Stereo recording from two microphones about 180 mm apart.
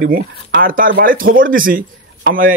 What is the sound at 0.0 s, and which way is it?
Speech, 55° right (ahead or behind).